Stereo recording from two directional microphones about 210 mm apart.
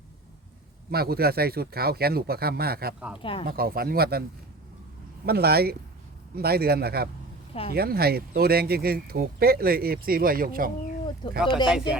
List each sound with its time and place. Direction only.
0.9 s speech: 50° right (ahead or behind)
3.2 s speech: 25° left (ahead or behind)
3.4 s speech: 45° right (ahead or behind)
5.2 s speech: 50° right (ahead or behind)
11.4 s speech: 20° left (ahead or behind)